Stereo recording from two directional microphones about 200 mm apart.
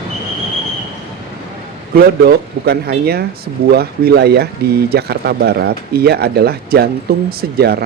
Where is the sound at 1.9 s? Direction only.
55° right (ahead or behind).